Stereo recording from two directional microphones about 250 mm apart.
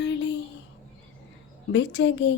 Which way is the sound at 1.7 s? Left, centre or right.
Left.